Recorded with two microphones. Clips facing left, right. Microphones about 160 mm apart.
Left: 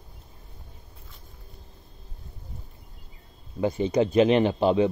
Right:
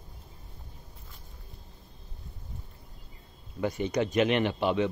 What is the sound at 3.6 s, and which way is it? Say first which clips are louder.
Speech: left 5 dB; 30° left (ahead or behind).